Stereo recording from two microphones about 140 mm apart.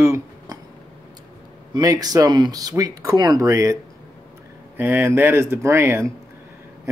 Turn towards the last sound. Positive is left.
turn(degrees=-20)  # may be behind; listen again after turning